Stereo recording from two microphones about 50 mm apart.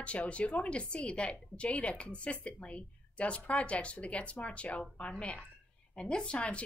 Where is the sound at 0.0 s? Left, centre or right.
Left.